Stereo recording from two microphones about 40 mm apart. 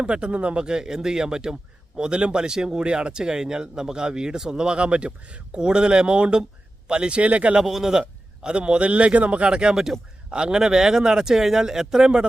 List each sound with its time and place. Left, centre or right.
0.0 s speech: right
7.2 s speech: right
7.6 s a man's voice: centre